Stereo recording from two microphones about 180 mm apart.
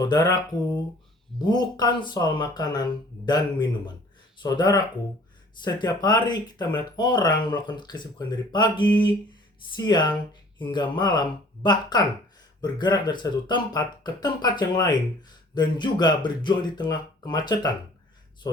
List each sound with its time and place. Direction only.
0.0 s speech: 20° left (ahead or behind)